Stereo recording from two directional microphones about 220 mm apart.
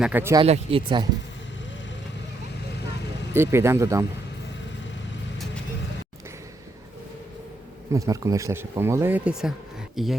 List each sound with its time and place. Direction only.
0.0 s speech: 10° right (ahead or behind)
0.4 s speech: 25° right (ahead or behind)
3.3 s speech: 10° right (ahead or behind)
7.9 s speech: 15° right (ahead or behind)